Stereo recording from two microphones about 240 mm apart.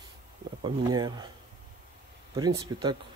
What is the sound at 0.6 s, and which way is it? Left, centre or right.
Speech, centre.